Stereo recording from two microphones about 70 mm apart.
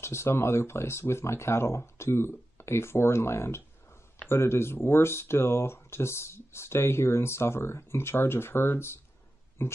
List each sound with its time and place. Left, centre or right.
0.0 s speech: left